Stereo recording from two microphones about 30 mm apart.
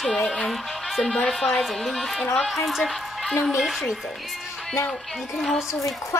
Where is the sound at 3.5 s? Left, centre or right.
Centre.